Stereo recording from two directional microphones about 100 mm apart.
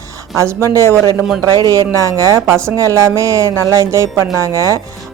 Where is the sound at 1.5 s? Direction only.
40° right (ahead or behind).